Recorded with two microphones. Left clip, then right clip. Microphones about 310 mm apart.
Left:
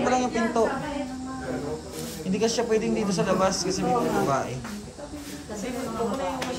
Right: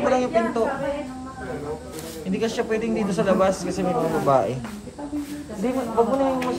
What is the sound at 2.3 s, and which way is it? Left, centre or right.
Speech, centre.